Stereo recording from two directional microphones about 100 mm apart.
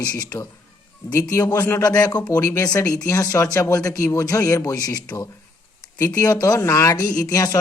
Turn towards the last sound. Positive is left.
turn(degrees=35)  # may be behind; listen again after turning